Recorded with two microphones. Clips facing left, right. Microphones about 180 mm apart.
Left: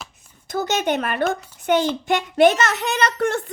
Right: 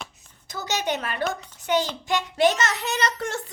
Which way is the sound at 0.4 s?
55° left (ahead or behind).